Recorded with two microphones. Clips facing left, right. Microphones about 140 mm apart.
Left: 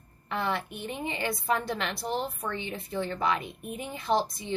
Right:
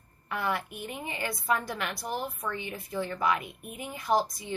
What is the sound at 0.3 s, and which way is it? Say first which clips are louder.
A woman's voice: left 1 dB; 25° left (ahead or behind).